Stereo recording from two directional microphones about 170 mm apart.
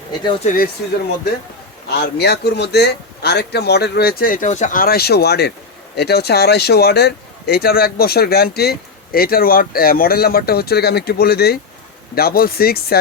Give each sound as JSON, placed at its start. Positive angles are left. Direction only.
{"t": 0.4, "sound": "speech", "side_deg": 55}
{"t": 1.9, "sound": "speech", "side_deg": 75}